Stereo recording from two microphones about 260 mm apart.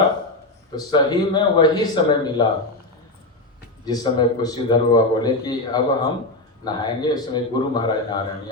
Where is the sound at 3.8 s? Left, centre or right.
Centre.